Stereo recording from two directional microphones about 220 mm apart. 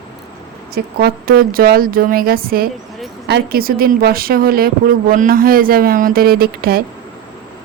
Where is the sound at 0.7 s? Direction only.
45° right (ahead or behind).